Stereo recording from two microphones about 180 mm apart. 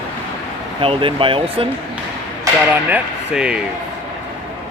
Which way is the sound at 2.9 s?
5° right (ahead or behind).